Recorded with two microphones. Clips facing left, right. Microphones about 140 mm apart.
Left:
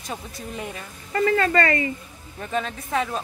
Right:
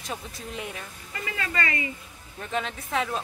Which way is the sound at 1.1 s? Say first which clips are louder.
Left 12 dB; 50° left (ahead or behind).